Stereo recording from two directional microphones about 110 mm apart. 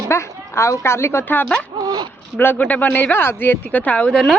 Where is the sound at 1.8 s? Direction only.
40° right (ahead or behind).